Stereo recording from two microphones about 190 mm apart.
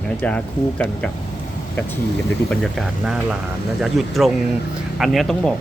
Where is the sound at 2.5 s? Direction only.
Centre (ahead or behind).